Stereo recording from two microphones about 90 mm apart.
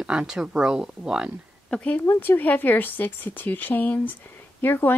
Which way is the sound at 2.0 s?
25° left (ahead or behind).